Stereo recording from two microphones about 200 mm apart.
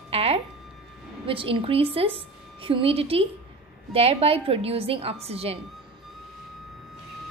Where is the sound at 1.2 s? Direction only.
25° right (ahead or behind).